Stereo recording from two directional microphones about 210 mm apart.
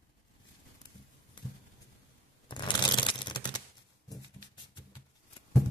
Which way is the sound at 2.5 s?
20° left (ahead or behind).